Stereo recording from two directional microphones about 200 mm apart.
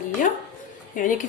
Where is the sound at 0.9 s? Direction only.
40° left (ahead or behind).